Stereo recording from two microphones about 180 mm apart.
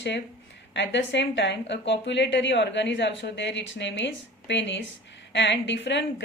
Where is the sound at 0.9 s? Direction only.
75° left (ahead or behind).